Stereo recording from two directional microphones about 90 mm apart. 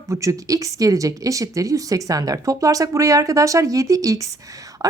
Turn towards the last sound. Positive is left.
turn(degrees=-40)  # may be behind; listen again after turning